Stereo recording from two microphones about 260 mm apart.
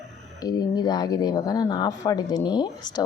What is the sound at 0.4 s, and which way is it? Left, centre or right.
A woman's voice, centre.